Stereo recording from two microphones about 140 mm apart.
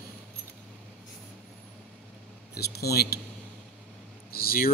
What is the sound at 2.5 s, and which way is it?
Speech, 90° left.